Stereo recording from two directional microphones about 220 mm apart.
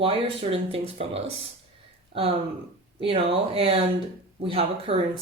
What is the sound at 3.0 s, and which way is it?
Speech, 25° right (ahead or behind).